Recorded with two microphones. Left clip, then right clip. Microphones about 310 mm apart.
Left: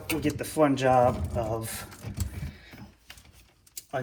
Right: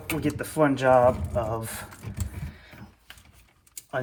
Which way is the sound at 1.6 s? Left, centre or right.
Right.